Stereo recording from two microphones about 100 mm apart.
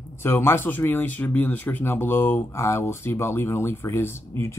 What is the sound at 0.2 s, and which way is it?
Speech, 25° left (ahead or behind).